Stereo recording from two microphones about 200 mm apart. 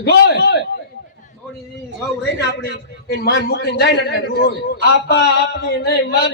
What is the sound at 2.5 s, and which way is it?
A man's voice, 55° left (ahead or behind).